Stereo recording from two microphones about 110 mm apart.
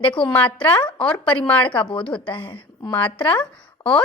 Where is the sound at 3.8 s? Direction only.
40° left (ahead or behind).